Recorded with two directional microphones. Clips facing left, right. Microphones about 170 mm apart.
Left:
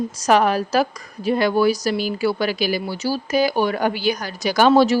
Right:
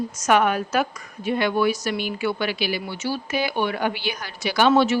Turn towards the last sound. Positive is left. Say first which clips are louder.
# left 3 dB
turn(degrees=35)  # may be behind; listen again after turning